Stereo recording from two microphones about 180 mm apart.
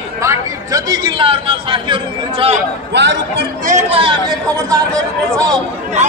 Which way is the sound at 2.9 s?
70° right (ahead or behind).